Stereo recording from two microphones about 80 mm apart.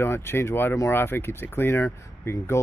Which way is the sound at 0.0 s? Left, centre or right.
Left.